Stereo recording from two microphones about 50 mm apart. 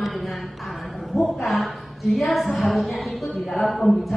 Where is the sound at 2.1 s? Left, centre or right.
Centre.